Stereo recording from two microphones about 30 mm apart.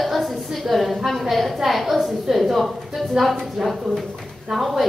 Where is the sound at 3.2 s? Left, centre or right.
Centre.